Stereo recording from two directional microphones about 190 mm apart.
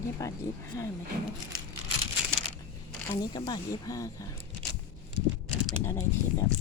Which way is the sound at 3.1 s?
20° left (ahead or behind).